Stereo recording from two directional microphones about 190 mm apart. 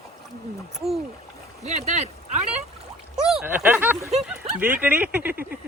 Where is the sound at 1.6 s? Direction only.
35° right (ahead or behind).